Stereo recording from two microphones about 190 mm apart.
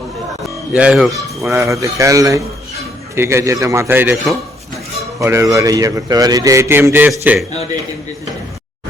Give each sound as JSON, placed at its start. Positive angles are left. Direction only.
{"t": 0.4, "sound": "a sound", "side_deg": -5}
{"t": 1.1, "sound": "a man's voice", "side_deg": -15}
{"t": 5.2, "sound": "a man's voice", "side_deg": -15}
{"t": 7.1, "sound": "speech", "side_deg": 0}